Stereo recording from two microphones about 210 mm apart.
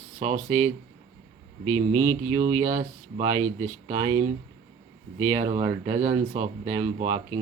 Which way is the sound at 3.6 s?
15° right (ahead or behind).